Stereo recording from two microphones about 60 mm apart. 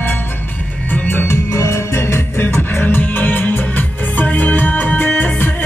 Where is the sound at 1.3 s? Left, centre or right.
Left.